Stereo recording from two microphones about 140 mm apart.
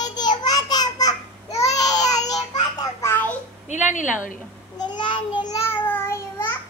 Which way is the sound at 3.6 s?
60° left (ahead or behind).